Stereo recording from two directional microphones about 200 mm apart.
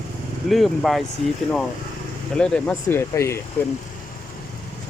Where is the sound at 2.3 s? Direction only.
5° left (ahead or behind).